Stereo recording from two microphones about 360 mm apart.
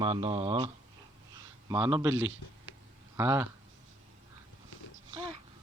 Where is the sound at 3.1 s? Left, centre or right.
Centre.